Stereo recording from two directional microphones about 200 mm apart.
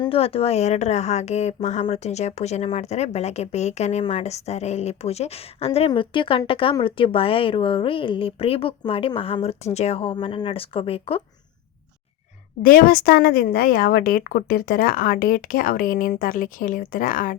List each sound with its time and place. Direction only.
0.0 s a woman's voice: 30° left (ahead or behind)
12.6 s a woman's voice: 45° left (ahead or behind)